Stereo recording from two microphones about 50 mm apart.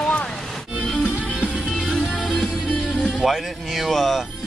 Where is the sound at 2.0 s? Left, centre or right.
Centre.